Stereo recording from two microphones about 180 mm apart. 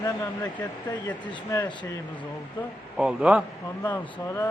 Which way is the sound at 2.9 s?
5° right (ahead or behind).